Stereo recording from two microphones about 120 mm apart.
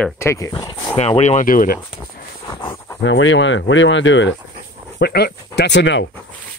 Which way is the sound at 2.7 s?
20° left (ahead or behind).